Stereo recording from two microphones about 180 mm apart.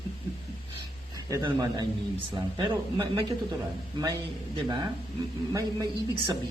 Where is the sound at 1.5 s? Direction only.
20° right (ahead or behind).